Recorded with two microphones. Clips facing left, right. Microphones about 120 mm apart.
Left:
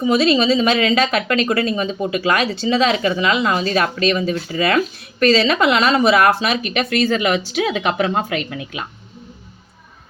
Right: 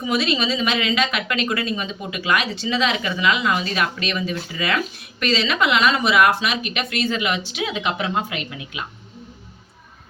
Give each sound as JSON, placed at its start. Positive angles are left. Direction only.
{"t": 0.0, "sound": "speech", "side_deg": 35}